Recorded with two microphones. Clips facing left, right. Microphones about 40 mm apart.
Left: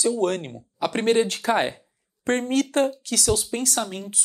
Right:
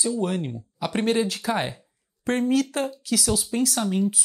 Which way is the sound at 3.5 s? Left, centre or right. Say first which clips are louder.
Right 3 dB; left.